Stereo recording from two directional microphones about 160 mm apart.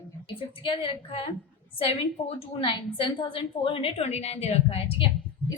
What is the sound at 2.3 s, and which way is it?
A woman's voice, 35° left (ahead or behind).